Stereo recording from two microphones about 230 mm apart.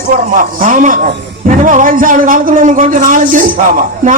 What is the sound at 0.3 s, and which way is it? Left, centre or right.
A man's voice, right.